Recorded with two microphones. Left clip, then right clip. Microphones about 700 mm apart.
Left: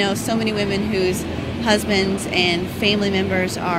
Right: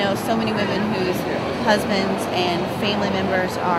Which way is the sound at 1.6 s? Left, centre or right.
Left.